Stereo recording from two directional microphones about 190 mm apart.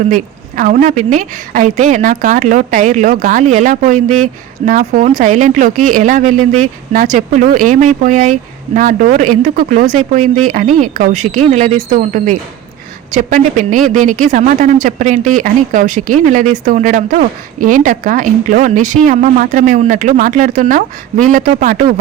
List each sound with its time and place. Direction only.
0.1 s a woman's voice: 45° right (ahead or behind)